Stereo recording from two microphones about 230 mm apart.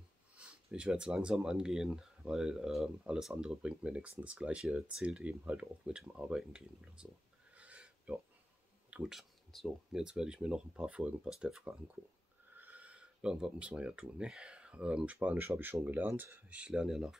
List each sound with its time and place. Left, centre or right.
0.4 s speech: centre
7.5 s a sound: centre
8.9 s speech: centre